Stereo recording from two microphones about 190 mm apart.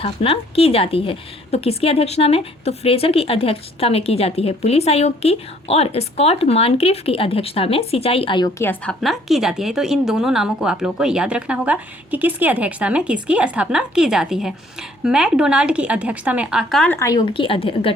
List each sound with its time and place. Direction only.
0.0 s a woman's voice: 30° left (ahead or behind)